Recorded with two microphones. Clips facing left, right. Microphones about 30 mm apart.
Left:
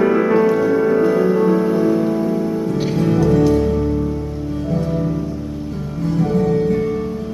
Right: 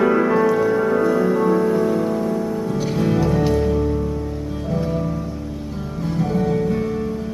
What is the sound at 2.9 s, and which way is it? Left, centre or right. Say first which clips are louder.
Music: left 4 dB; centre.